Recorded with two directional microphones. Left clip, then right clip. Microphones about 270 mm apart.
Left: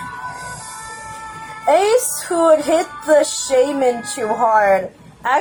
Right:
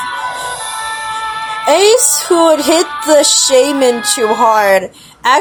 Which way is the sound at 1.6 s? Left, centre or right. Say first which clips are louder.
Right 5 dB; right.